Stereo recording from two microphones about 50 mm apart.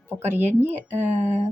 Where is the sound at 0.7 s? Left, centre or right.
Right.